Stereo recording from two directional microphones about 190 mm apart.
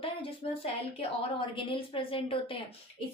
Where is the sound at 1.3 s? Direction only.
25° left (ahead or behind).